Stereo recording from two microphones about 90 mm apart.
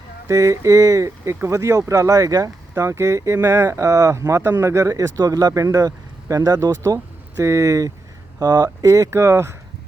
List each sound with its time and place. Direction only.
0.3 s speech: 35° right (ahead or behind)